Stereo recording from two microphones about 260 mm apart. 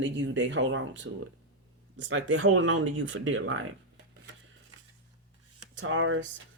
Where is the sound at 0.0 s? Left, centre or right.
Right.